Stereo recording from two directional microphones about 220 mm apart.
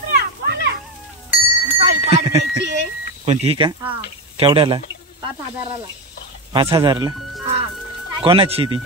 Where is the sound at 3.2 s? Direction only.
30° right (ahead or behind).